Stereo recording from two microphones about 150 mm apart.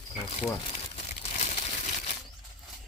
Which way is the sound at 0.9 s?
45° left (ahead or behind).